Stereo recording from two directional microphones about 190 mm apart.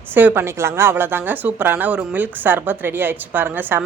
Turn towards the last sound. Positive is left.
turn(degrees=-10)  # may be behind; listen again after turning